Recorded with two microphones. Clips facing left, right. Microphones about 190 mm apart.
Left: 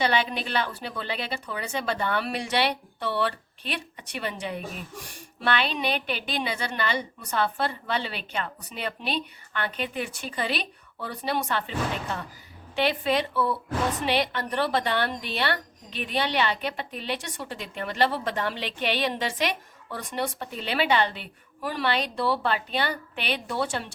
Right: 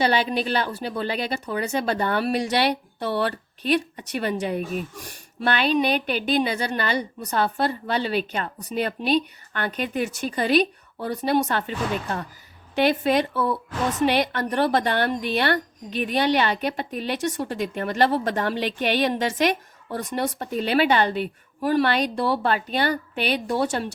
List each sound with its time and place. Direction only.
0.0 s a woman's voice: 35° right (ahead or behind)
12.7 s a woman's voice: 45° right (ahead or behind)